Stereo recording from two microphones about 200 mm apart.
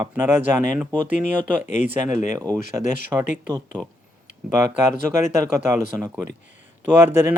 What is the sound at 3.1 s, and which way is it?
Speech, 10° right (ahead or behind).